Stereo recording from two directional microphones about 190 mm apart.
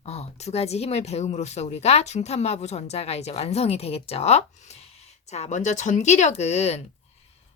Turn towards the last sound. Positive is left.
turn(degrees=35)  # may be behind; listen again after turning